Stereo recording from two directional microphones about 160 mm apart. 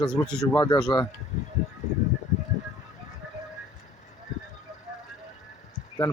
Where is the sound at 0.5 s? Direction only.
20° left (ahead or behind).